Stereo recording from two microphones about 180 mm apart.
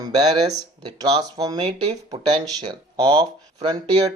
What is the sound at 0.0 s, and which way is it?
Speech, 20° right (ahead or behind).